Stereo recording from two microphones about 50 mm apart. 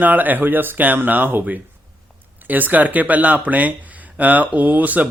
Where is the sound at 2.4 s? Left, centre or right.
Right.